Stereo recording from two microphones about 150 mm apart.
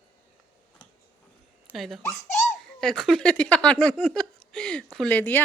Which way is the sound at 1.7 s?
Centre (ahead or behind).